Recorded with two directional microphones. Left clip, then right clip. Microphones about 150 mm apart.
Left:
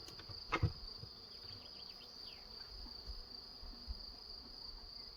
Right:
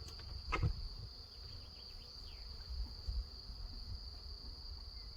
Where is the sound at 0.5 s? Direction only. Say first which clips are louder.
Left 1 dB; 25° left (ahead or behind).